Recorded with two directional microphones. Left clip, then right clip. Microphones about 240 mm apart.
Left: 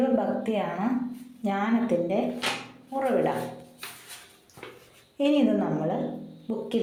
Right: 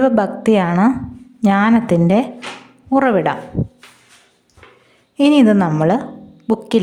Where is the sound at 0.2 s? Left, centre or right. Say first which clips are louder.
Right 12 dB; right.